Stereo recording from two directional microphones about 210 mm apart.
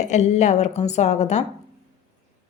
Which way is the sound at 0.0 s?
35° left (ahead or behind).